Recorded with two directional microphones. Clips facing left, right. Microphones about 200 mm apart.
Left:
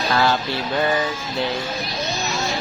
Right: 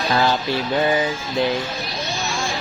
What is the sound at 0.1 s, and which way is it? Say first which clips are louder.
Speech: right 1 dB; 15° right (ahead or behind).